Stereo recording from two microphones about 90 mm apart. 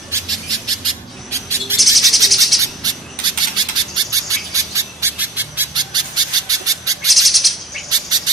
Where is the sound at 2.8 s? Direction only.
45° right (ahead or behind).